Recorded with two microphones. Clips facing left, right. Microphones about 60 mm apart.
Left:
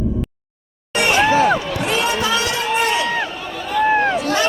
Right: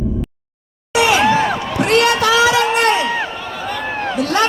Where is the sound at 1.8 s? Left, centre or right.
Right.